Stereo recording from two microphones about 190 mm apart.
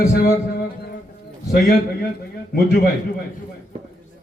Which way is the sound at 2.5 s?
50° left (ahead or behind).